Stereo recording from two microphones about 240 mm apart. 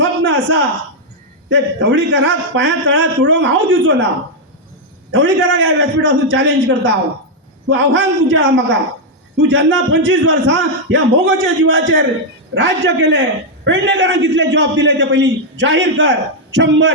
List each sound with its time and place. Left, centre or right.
0.0 s a sound: right
1.5 s a man's voice: right
5.1 s a man's voice: right